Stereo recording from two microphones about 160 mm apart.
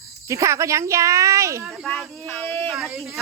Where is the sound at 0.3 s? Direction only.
20° right (ahead or behind).